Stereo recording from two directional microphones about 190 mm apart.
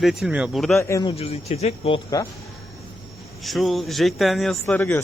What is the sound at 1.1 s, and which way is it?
Speech, 30° left (ahead or behind).